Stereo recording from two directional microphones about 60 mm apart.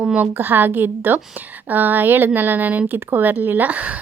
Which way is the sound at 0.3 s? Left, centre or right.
Right.